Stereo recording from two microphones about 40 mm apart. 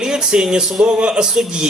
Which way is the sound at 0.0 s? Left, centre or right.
Centre.